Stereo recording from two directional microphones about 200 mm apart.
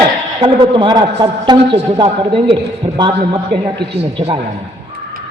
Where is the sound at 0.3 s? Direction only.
25° right (ahead or behind).